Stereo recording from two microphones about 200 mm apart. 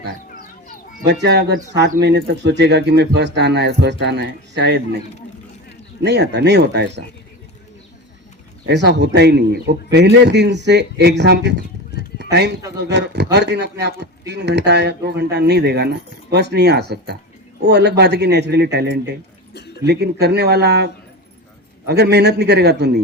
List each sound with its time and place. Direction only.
0.3 s children playing: 45° left (ahead or behind)
1.0 s speech: 55° right (ahead or behind)
6.1 s speech: 55° right (ahead or behind)
8.6 s speech: 60° right (ahead or behind)
19.5 s a sound: 55° left (ahead or behind)
19.8 s speech: 55° right (ahead or behind)